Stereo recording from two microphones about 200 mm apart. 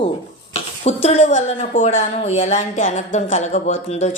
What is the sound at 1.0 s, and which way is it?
A woman's voice, 35° left (ahead or behind).